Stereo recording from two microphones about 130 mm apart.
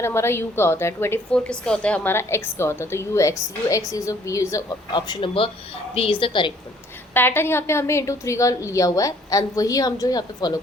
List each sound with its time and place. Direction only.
0.0 s a woman's voice: 20° left (ahead or behind)
1.3 s a woman's voice: 5° left (ahead or behind); by 6.5 s 40° left (ahead or behind)
7.1 s a woman's voice: 15° left (ahead or behind)